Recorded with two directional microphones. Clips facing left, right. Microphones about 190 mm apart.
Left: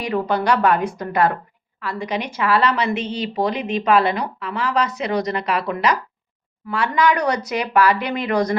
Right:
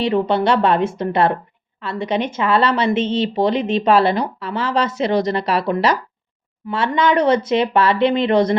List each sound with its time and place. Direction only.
0.0 s a woman's voice: 25° right (ahead or behind)